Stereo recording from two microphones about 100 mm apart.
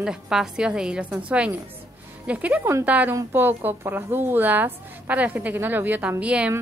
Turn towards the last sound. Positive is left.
turn(degrees=-10)  # may be behind; listen again after turning